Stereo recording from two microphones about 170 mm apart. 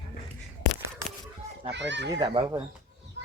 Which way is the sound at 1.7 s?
90° right.